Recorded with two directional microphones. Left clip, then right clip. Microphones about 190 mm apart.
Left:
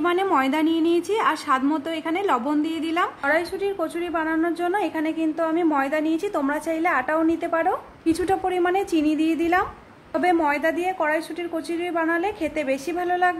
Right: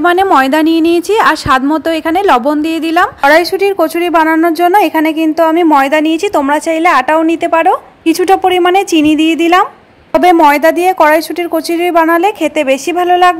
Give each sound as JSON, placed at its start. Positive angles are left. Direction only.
{"t": 0.0, "sound": "a woman's voice", "side_deg": -35}